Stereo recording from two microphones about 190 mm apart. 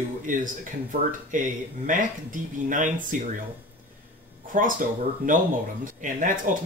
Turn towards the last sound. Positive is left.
turn(degrees=-45)  # may be behind; listen again after turning